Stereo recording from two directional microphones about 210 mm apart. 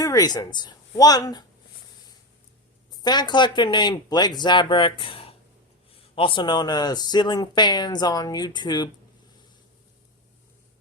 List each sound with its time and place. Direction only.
0.0 s speech: 15° left (ahead or behind)
2.9 s speech: 20° left (ahead or behind)